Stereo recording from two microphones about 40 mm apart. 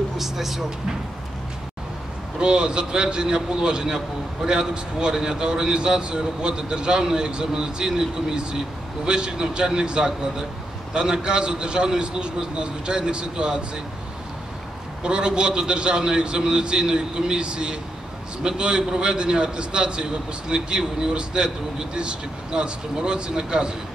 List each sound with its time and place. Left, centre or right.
0.2 s speech: centre
2.3 s a man's voice: right
15.0 s a man's voice: right